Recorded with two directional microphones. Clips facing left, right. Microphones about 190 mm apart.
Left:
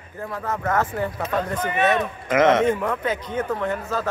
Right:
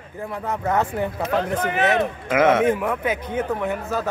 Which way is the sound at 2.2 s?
10° right (ahead or behind).